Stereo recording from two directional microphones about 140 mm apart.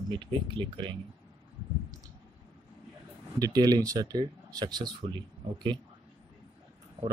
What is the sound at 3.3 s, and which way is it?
Speech, 25° right (ahead or behind).